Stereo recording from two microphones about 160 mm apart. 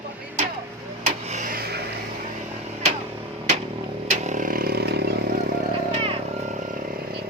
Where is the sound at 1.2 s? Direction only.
50° right (ahead or behind).